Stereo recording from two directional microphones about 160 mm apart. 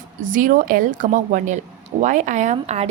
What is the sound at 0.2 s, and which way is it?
A woman's voice, 55° right (ahead or behind).